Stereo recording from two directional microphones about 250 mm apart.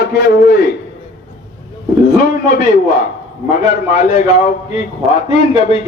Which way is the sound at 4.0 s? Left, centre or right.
Left.